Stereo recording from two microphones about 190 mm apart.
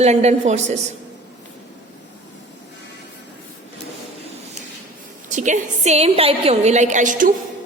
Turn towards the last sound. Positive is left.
turn(degrees=-40)  # may be behind; listen again after turning